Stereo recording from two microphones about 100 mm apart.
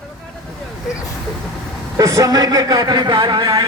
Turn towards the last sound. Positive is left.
turn(degrees=-40)  # may be behind; listen again after turning